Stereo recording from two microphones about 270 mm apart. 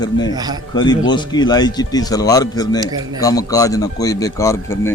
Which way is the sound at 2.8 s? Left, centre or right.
Centre.